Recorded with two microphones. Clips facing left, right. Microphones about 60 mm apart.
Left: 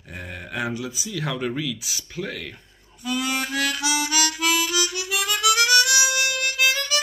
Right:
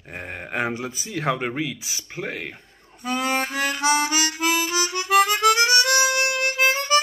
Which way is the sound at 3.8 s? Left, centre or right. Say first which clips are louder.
Right 5 dB; right.